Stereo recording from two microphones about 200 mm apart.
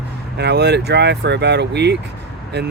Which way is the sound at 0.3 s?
55° right (ahead or behind).